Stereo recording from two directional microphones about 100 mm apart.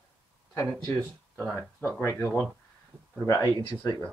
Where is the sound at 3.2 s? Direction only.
35° left (ahead or behind).